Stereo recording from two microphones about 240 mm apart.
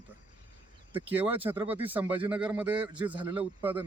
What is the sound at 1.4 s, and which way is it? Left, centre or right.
A man's voice, centre.